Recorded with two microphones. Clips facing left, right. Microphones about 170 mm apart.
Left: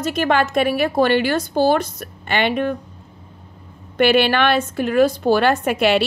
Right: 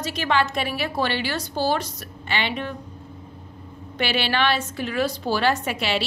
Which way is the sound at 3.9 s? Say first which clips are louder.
Left 9 dB; 55° left (ahead or behind).